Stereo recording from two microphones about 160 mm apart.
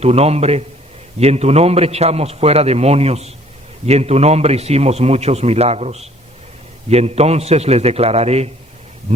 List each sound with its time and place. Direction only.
0.0 s a man's voice: 40° right (ahead or behind)